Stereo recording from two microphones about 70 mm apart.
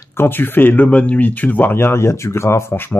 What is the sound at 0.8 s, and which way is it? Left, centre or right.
Speech, centre.